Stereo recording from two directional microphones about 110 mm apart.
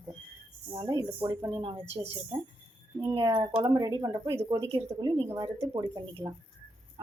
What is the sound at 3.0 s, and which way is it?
Speech, 40° right (ahead or behind).